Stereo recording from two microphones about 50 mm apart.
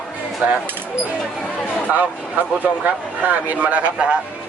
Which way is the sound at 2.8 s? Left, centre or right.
Right.